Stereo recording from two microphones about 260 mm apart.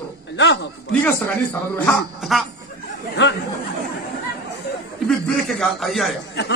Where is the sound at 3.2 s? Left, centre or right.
Left.